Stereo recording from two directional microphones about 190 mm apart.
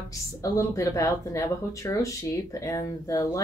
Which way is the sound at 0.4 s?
15° left (ahead or behind).